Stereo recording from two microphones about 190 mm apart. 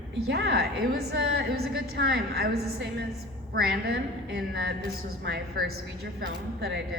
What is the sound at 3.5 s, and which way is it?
Speech, 55° right (ahead or behind).